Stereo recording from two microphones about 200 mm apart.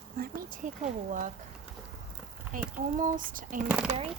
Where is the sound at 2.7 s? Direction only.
40° right (ahead or behind).